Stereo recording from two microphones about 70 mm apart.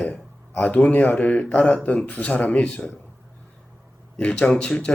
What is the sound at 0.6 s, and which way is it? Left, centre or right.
Speech, left.